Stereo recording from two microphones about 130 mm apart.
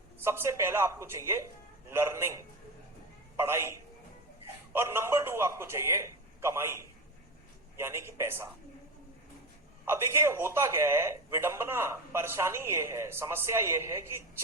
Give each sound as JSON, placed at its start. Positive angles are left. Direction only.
{"t": 0.3, "sound": "speech", "side_deg": -20}
{"t": 9.8, "sound": "speech", "side_deg": -20}